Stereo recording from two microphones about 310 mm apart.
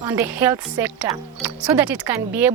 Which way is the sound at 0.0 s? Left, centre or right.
Centre.